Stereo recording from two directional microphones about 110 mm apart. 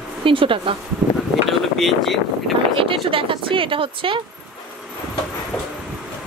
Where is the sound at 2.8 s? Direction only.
55° right (ahead or behind).